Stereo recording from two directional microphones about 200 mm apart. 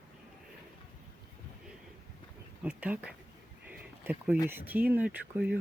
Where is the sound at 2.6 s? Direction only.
5° right (ahead or behind).